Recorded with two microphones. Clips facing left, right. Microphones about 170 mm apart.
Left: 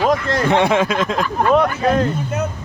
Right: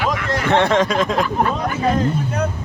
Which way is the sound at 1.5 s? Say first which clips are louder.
Left 5 dB; 70° left (ahead or behind).